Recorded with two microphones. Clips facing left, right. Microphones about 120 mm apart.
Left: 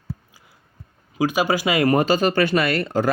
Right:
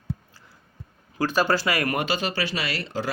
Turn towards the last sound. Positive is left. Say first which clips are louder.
# left 9 dB
turn(degrees=50)  # may be behind; listen again after turning